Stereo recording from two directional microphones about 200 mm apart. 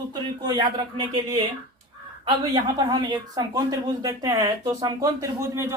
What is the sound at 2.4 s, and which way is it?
Speech, 20° right (ahead or behind).